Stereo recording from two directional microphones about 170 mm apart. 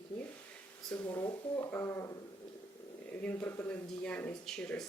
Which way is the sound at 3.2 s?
10° left (ahead or behind).